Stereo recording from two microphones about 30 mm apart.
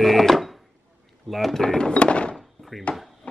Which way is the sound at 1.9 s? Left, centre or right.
Left.